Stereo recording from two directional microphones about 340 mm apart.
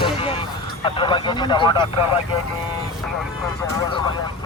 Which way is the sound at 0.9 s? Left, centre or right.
Centre.